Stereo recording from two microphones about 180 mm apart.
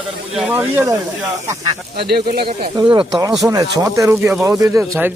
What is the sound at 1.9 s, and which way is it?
Speech, 60° right (ahead or behind).